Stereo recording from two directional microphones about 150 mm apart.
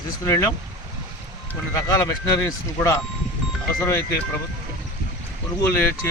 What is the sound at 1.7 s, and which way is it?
Speech, 20° left (ahead or behind).